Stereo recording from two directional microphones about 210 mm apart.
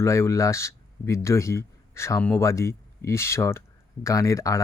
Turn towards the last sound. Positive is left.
turn(degrees=15)  # may be behind; listen again after turning